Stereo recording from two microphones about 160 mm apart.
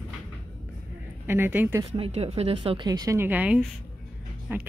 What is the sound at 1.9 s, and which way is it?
Speech, 40° right (ahead or behind).